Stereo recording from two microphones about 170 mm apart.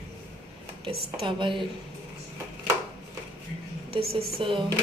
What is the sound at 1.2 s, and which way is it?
Speech, 30° right (ahead or behind).